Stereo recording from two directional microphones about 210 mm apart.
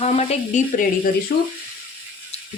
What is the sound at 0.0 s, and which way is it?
Speech, 30° left (ahead or behind).